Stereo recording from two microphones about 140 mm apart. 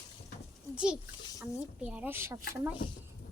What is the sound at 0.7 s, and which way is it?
A woman's voice, 5° right (ahead or behind).